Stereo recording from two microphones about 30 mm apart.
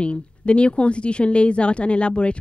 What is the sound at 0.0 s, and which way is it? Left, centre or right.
A woman's voice, left.